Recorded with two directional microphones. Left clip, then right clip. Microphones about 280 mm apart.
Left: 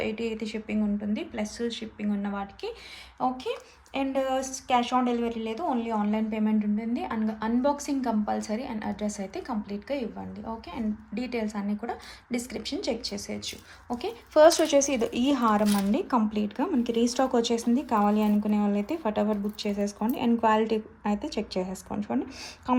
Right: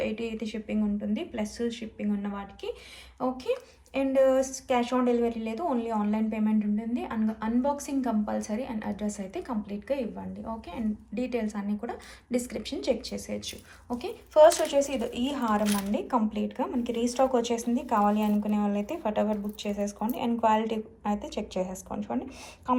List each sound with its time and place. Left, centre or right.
0.0 s speech: centre